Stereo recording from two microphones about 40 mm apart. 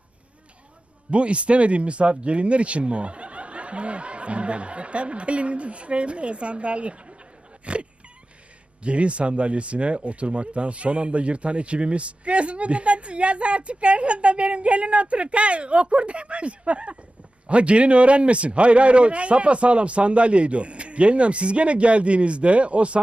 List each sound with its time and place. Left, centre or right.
1.1 s speech: right
7.6 s wail: right
8.8 s speech: right